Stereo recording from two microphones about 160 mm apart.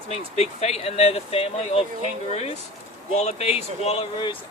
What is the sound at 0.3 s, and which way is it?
Speech, 40° left (ahead or behind).